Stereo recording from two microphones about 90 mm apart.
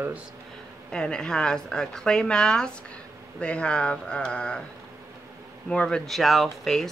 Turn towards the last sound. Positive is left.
turn(degrees=5)  # may be behind; listen again after turning